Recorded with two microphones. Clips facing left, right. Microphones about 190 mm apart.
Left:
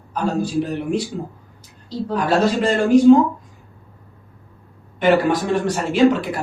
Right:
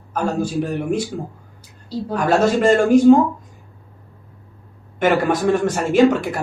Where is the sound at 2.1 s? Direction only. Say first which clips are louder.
Right 1 dB; 45° right (ahead or behind).